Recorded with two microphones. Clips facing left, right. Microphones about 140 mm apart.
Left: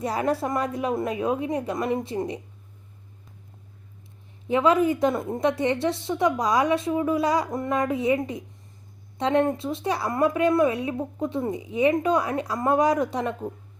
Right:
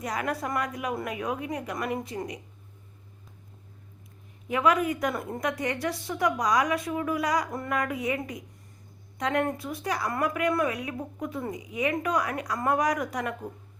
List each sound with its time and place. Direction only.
0.0 s a woman's voice: 30° left (ahead or behind)
4.4 s a woman's voice: 25° left (ahead or behind)